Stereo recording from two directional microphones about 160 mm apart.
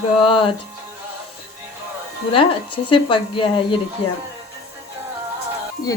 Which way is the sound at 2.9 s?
30° left (ahead or behind).